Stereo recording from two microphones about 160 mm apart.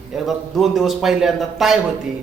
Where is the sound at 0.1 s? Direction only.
Centre (ahead or behind).